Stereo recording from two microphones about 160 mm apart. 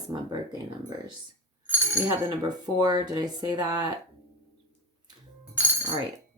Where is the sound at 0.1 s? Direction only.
25° right (ahead or behind).